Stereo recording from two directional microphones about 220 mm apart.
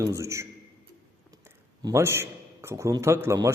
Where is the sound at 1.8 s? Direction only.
15° right (ahead or behind).